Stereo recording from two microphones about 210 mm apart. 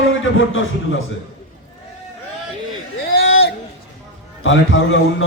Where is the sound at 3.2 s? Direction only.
75° left (ahead or behind).